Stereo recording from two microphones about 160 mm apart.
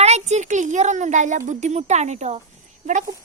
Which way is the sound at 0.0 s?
45° right (ahead or behind).